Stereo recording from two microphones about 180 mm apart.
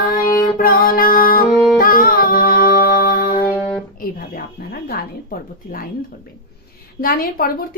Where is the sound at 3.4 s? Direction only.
10° left (ahead or behind).